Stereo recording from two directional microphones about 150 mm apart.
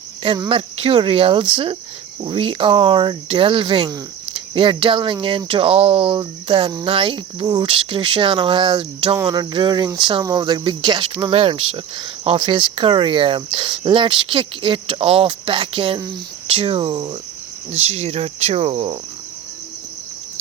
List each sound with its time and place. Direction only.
0.3 s speech: 35° right (ahead or behind)
17.7 s speech: 45° right (ahead or behind)